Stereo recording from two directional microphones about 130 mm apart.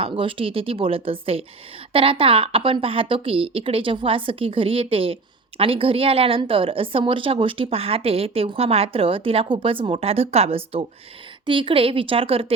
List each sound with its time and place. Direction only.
0.0 s a woman's voice: 45° right (ahead or behind)